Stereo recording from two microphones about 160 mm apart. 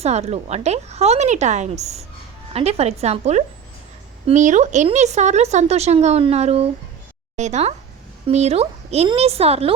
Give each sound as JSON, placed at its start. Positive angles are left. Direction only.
{"t": 0.0, "sound": "speech", "side_deg": -45}